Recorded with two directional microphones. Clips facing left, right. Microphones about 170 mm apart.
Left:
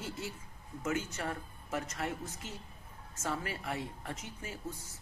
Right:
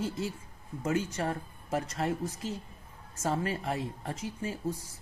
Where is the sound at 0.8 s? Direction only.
35° right (ahead or behind).